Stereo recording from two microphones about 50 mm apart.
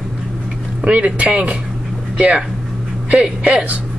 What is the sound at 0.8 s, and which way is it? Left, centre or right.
A woman's voice, right.